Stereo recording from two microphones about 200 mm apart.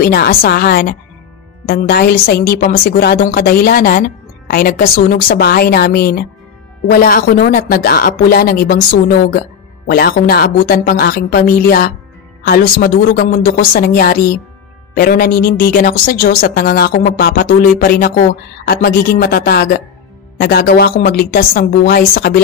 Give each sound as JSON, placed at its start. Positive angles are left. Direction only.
{"t": 0.0, "sound": "a woman's voice", "side_deg": 50}